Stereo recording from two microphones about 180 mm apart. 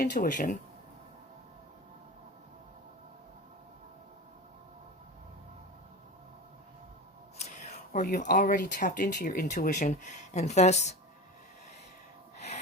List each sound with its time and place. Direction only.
0.0 s speech: 50° left (ahead or behind)
7.9 s speech: 45° left (ahead or behind)